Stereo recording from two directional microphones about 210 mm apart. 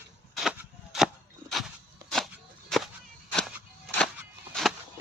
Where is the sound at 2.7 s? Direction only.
Centre (ahead or behind).